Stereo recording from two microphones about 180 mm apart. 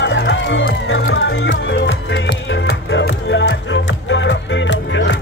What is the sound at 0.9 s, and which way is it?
Music, 90° left.